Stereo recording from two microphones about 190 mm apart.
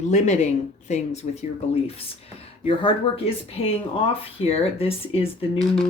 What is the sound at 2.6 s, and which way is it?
Speech, 30° left (ahead or behind).